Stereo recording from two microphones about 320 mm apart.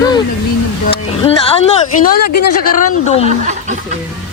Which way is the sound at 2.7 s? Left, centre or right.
Left.